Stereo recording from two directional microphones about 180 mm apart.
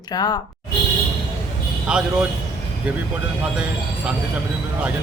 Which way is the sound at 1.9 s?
5° right (ahead or behind).